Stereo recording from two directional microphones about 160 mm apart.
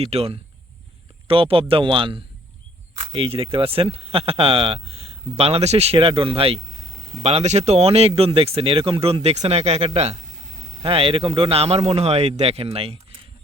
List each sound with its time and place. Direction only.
0.0 s speech: 40° right (ahead or behind)